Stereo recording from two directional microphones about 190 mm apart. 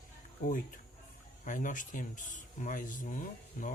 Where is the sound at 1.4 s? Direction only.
40° left (ahead or behind).